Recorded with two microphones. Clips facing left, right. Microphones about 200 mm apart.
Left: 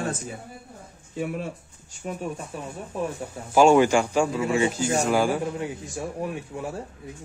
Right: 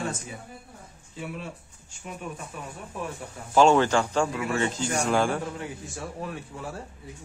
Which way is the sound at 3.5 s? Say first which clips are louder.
Left 3 dB; 10° left (ahead or behind).